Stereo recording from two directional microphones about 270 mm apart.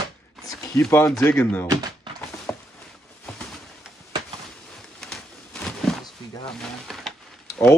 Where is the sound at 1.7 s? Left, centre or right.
Centre.